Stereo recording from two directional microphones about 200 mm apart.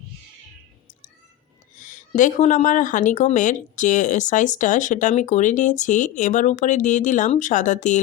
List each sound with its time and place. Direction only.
1.7 s speech: 40° left (ahead or behind)